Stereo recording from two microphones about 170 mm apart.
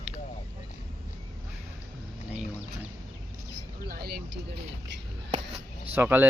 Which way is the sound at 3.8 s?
65° right (ahead or behind).